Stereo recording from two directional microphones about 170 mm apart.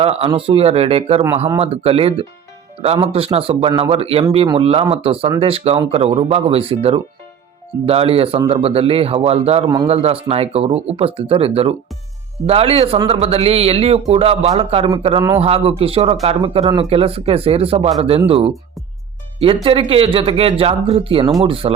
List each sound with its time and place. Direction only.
0.0 s speech: 35° right (ahead or behind)
19.6 s speech: 30° right (ahead or behind)